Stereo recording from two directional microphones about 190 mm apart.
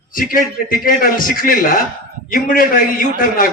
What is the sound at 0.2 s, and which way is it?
A man's voice, 50° left (ahead or behind).